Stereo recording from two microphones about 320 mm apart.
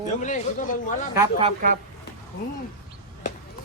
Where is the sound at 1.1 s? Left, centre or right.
Centre.